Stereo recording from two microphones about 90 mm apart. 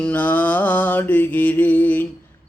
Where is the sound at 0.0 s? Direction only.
20° left (ahead or behind).